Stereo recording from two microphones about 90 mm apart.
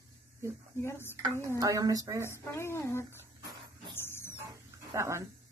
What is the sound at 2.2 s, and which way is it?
Speech, 30° left (ahead or behind).